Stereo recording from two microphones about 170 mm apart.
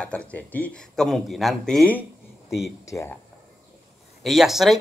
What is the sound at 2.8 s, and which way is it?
Speech, 15° left (ahead or behind).